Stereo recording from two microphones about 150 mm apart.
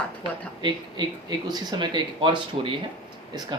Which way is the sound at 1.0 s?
30° right (ahead or behind).